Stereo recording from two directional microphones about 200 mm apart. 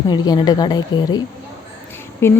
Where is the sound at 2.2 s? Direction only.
10° left (ahead or behind).